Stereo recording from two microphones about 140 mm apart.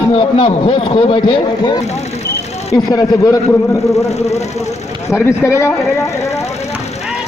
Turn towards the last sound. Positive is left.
turn(degrees=20)  # may be behind; listen again after turning